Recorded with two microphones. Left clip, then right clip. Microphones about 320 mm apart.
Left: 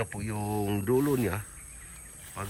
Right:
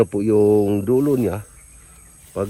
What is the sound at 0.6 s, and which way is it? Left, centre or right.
Speech, centre.